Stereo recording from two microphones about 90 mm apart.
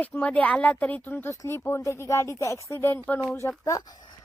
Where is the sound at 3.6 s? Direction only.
45° left (ahead or behind).